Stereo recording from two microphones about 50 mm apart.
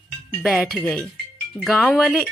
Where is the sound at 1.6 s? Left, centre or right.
Left.